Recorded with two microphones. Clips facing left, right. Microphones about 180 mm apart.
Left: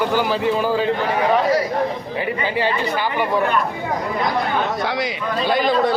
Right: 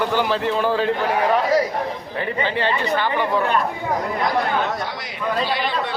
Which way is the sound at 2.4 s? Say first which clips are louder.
Left 1 dB; 10° left (ahead or behind).